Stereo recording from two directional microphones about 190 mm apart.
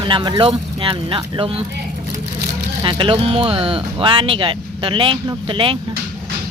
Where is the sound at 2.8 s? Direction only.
25° right (ahead or behind).